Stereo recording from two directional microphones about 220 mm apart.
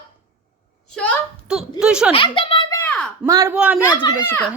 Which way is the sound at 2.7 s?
10° left (ahead or behind).